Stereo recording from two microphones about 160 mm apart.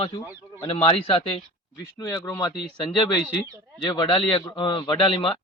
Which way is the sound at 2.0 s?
20° left (ahead or behind).